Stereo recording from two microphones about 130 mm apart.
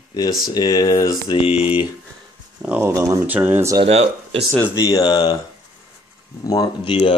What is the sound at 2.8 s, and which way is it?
Speech, 25° right (ahead or behind).